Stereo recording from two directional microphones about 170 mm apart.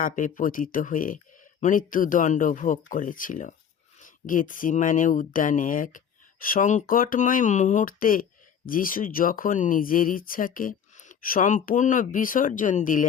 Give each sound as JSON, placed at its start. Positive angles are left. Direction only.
{"t": 0.0, "sound": "speech", "side_deg": 50}